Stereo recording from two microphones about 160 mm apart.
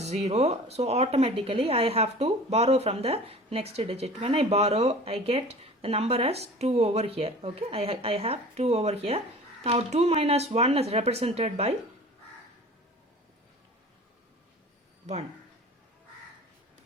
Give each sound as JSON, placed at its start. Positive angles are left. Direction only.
{"t": 0.0, "sound": "speech", "side_deg": -40}